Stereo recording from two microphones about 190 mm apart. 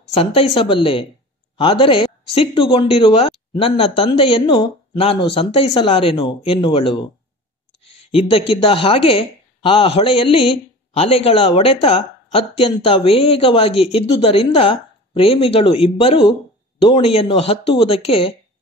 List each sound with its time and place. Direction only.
0.1 s speech: 30° left (ahead or behind)
8.1 s speech: 30° left (ahead or behind)